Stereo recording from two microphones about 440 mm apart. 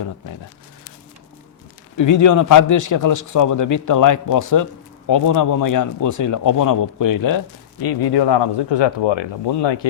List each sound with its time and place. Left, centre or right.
2.0 s speech: left